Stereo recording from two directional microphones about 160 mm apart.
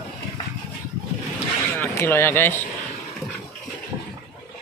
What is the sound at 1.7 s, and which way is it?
Speech, 15° left (ahead or behind).